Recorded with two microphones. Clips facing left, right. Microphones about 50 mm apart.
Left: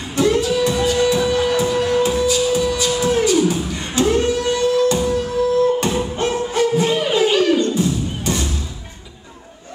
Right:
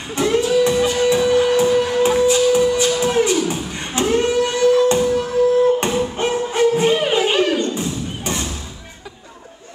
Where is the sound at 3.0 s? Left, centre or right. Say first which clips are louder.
Left 1 dB; right.